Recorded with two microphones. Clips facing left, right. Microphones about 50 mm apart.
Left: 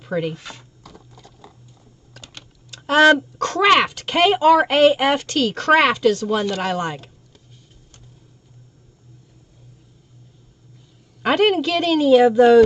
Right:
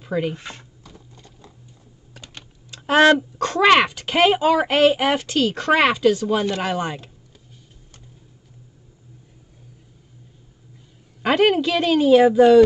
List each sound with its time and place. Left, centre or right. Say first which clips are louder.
0.0 s speech: even; centre
0.4 s speech: right 1 dB; right
2.1 s typing: even; centre
3.3 s speech: even; centre
11.2 s speech: even; centre